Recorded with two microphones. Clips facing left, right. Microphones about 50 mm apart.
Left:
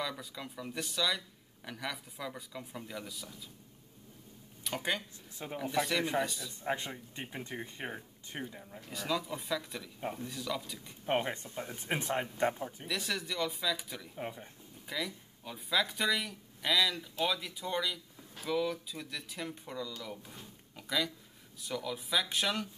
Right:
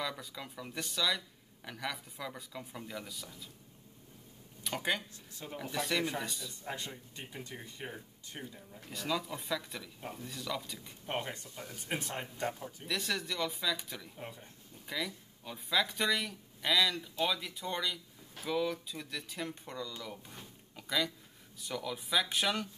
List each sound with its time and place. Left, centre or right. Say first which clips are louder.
0.0 s speech: left 1 dB; centre
4.6 s speech: even; centre
6.6 s speech: left 8 dB; left
8.8 s speech: left 1 dB; centre
9.9 s speech: left 9 dB; centre
10.2 s speech: left 1 dB; centre
11.1 s speech: left 6 dB; left
12.8 s speech: right 2 dB; centre
14.1 s speech: left 5 dB; centre
14.9 s speech: even; centre
20.7 s a sound: even; centre
21.5 s speech: left 1 dB; centre